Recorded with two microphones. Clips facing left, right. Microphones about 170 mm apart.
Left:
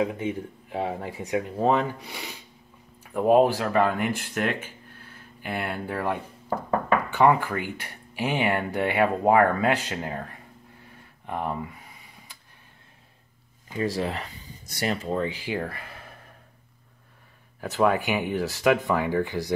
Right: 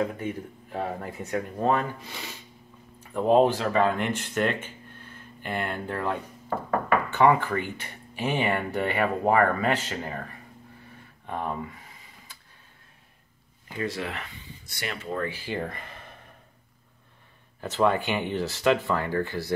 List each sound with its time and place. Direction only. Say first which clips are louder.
0.0 s speech: left 2 dB; 10° left (ahead or behind)
11.2 s speech: left 2 dB; 15° left (ahead or behind)
13.8 s speech: left 5 dB; 35° left (ahead or behind)
15.1 s speech: left 3 dB; 15° left (ahead or behind)
17.6 s speech: left 1 dB; 10° left (ahead or behind)